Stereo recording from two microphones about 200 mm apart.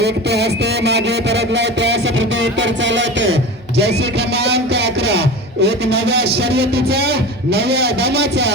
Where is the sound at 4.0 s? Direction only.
55° right (ahead or behind).